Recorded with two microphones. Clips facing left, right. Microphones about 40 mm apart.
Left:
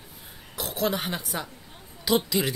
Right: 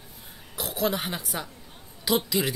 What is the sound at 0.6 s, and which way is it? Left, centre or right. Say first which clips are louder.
Speech: even; centre.